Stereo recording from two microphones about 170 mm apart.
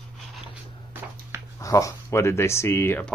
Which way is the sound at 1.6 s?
20° left (ahead or behind).